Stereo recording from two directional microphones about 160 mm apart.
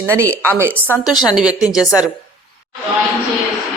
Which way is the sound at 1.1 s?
25° left (ahead or behind).